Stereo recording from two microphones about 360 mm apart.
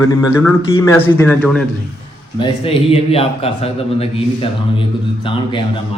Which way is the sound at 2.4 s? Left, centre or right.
Centre.